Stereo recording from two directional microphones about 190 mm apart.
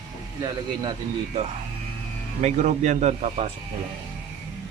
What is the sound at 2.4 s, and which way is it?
A man's voice, 40° right (ahead or behind).